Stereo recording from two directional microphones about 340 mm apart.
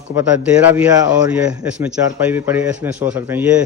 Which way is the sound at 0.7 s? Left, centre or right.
Centre.